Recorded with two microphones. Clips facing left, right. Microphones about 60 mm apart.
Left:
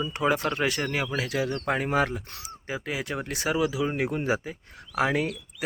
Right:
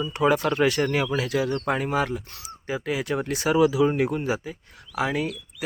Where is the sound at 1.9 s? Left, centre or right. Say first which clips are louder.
Left 2 dB; left.